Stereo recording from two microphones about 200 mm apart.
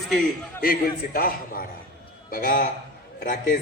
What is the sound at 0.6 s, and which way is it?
A man's voice, 45° left (ahead or behind).